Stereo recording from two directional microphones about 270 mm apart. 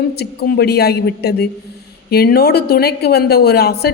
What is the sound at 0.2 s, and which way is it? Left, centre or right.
A woman's voice, left.